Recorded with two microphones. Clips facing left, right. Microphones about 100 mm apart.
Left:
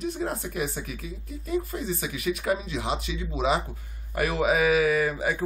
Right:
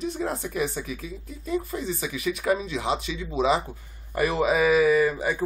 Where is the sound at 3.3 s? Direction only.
Centre (ahead or behind).